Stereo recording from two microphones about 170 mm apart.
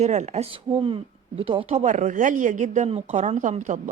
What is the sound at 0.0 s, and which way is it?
Speech, 45° right (ahead or behind).